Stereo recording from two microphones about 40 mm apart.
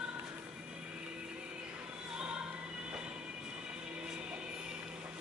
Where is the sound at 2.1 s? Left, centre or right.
Right.